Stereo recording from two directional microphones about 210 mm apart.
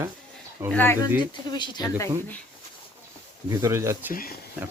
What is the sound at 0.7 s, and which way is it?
Speech, 10° left (ahead or behind).